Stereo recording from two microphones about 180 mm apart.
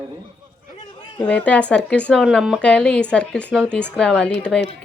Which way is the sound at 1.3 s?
5° left (ahead or behind).